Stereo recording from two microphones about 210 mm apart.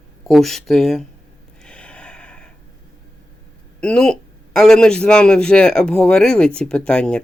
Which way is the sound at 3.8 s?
5° left (ahead or behind).